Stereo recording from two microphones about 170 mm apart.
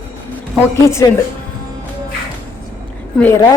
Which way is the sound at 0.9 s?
15° left (ahead or behind).